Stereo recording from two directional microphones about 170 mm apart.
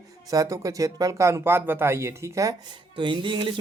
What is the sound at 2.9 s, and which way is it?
Speech, 30° right (ahead or behind).